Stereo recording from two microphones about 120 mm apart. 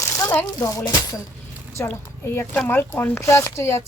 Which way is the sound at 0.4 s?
30° left (ahead or behind).